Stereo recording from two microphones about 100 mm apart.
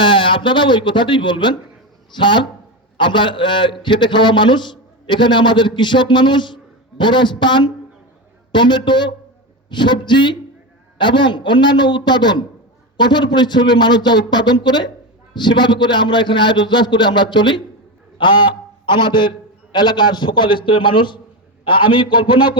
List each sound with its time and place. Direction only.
0.0 s a man's voice: 55° left (ahead or behind)